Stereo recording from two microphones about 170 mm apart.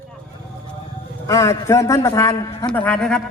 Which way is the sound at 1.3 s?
20° left (ahead or behind).